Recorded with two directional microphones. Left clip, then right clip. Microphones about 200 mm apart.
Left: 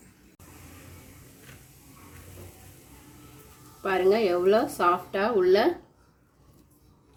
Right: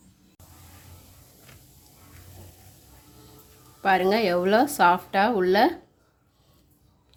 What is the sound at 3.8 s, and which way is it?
Speech, 60° right (ahead or behind).